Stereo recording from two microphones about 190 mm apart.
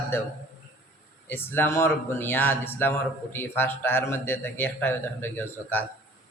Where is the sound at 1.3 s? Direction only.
10° left (ahead or behind).